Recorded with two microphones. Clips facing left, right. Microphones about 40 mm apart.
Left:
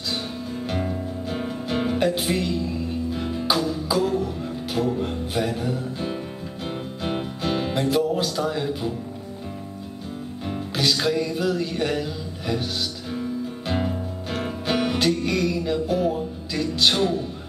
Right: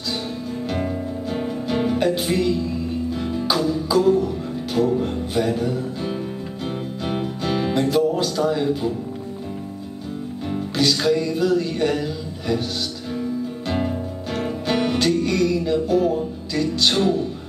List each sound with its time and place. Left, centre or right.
1.3 s music: centre
10.5 s music: centre
13.1 s music: centre